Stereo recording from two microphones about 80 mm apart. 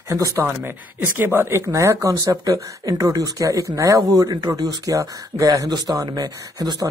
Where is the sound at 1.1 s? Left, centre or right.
Right.